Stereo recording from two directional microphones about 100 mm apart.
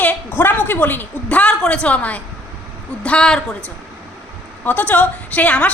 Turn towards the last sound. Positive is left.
turn(degrees=15)  # may be behind; listen again after turning